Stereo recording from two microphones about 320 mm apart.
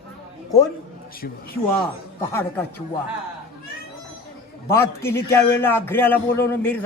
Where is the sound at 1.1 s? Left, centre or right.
Left.